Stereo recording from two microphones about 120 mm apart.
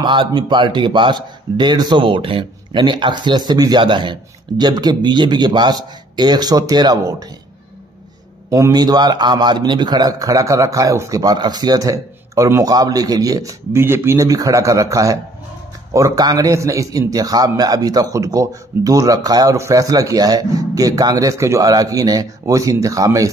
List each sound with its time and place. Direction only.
0.0 s speech: 40° right (ahead or behind)
8.5 s a man's voice: 25° right (ahead or behind)